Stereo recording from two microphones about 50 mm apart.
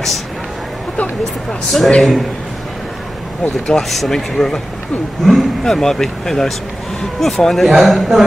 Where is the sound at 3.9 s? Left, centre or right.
Centre.